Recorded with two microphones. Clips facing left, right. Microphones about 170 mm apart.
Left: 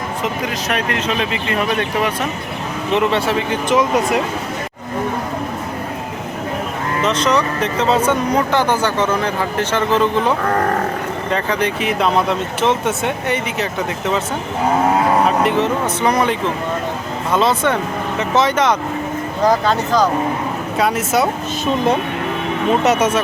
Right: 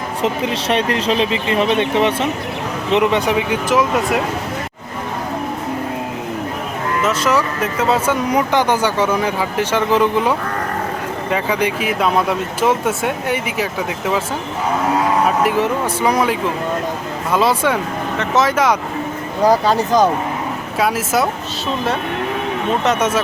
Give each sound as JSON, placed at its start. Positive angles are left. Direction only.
{"t": 0.2, "sound": "speech", "side_deg": -30}
{"t": 7.0, "sound": "speech", "side_deg": -5}
{"t": 16.0, "sound": "speech", "side_deg": -5}
{"t": 20.7, "sound": "speech", "side_deg": 0}
{"t": 22.8, "sound": "speech", "side_deg": 5}